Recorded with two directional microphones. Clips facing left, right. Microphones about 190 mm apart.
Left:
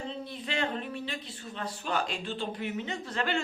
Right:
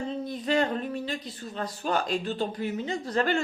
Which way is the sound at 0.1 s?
40° right (ahead or behind).